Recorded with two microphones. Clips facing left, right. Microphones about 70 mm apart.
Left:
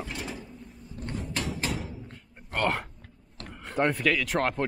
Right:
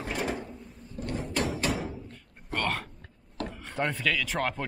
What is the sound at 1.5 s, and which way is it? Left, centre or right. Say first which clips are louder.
Music: right 2 dB; centre.